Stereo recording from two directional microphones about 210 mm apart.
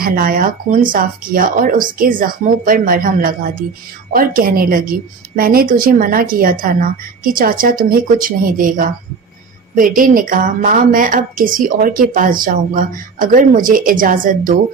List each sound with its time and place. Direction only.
0.0 s a woman's voice: 45° right (ahead or behind)